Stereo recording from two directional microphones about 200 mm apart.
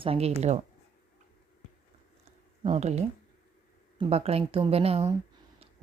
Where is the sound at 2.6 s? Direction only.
30° right (ahead or behind).